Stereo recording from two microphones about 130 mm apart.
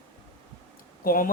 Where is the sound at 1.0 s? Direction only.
90° left.